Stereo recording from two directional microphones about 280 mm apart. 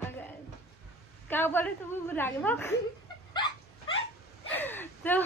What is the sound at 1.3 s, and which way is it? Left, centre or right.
A woman's voice, centre.